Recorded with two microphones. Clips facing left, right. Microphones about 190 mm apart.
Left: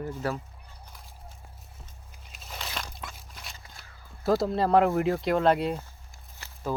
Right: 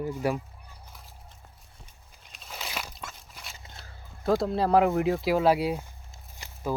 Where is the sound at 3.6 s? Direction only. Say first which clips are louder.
Right 2 dB; 25° right (ahead or behind).